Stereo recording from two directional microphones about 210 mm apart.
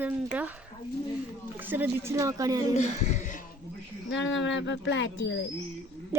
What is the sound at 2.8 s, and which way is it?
Speech, 35° left (ahead or behind).